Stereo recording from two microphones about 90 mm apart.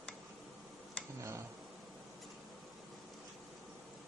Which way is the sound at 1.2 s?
35° right (ahead or behind).